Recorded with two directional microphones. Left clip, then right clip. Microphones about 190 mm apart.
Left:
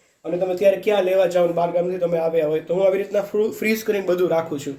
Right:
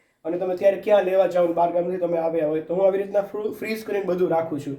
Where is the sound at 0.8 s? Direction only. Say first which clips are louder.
Even; 45° left (ahead or behind).